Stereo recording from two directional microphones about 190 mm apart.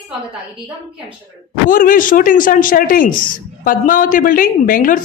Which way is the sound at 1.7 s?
45° left (ahead or behind).